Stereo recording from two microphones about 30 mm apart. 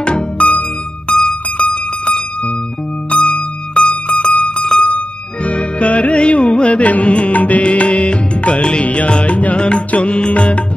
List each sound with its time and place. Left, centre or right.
0.4 s music: left
1.7 s a sound: left
3.1 s music: left
3.8 s music: left
4.4 s music: left
4.8 s music: left
7.3 s music: left
9.6 s music: left